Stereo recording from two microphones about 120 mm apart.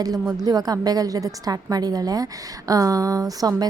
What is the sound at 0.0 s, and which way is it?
Speech, 30° right (ahead or behind).